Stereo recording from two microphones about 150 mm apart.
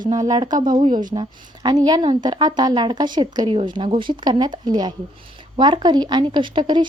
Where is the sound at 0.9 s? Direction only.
60° right (ahead or behind).